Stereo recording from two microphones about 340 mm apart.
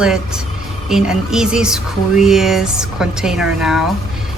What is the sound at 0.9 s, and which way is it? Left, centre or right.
A woman's voice, centre.